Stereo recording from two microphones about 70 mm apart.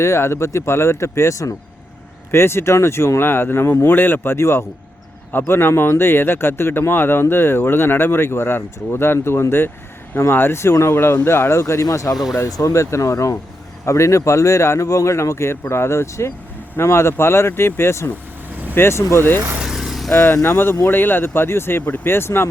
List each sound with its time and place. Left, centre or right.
0.0 s speech: left
2.3 s speech: left
11.6 s speech: left
19.5 s vehicle: centre
20.3 s speech: left